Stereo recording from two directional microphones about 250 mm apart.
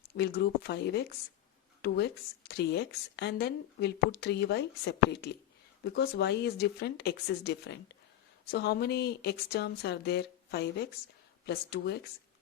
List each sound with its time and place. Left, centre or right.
0.2 s a woman's voice: left